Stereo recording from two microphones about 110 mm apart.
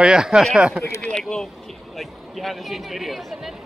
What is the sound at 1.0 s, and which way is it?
Speech, 5° left (ahead or behind).